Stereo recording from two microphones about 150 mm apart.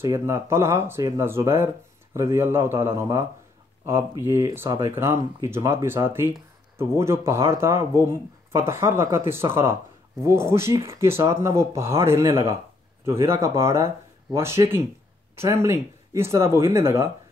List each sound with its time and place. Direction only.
0.0 s speech: 20° right (ahead or behind)